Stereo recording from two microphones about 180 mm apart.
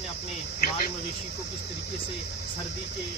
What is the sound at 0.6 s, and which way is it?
Speech, 55° left (ahead or behind).